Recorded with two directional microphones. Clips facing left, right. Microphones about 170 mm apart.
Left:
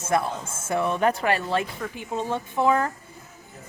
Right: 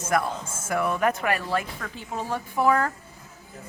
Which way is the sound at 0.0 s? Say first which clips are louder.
Left 1 dB; 25° left (ahead or behind).